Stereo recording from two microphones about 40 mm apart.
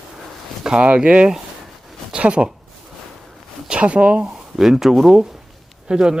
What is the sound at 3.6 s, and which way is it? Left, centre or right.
Speech, right.